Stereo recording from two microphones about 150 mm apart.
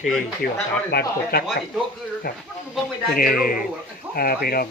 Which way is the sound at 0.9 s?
90° left.